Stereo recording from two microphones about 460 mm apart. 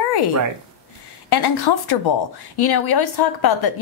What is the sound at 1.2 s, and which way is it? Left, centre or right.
A woman's voice, left.